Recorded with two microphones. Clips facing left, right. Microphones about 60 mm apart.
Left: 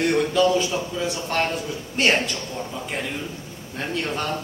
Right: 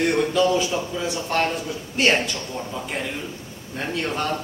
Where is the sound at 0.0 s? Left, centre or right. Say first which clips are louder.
Even; centre.